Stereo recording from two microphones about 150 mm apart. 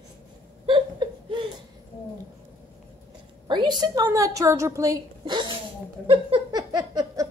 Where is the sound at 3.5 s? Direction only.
30° right (ahead or behind).